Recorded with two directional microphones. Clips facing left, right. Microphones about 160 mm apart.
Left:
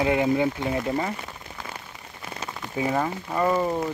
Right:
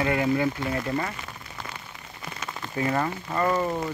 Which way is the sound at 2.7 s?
10° left (ahead or behind).